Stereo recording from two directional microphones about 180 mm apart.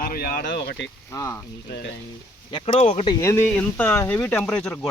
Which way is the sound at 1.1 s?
20° left (ahead or behind).